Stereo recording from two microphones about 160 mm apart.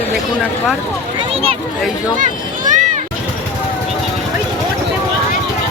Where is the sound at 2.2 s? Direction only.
50° right (ahead or behind).